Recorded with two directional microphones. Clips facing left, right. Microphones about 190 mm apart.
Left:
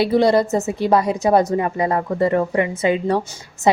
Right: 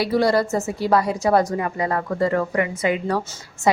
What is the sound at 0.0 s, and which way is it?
A woman's voice, 25° left (ahead or behind).